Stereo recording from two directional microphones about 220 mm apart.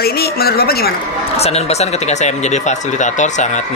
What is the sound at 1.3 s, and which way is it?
Speech, 30° left (ahead or behind).